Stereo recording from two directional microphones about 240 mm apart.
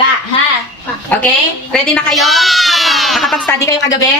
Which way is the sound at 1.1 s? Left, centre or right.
Centre.